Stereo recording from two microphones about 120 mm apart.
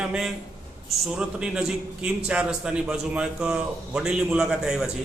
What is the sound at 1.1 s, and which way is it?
A man's voice, 5° right (ahead or behind).